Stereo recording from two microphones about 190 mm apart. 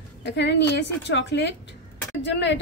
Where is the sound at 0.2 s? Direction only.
65° left (ahead or behind).